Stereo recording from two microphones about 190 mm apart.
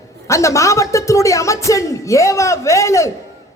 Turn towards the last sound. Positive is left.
turn(degrees=15)  # may be behind; listen again after turning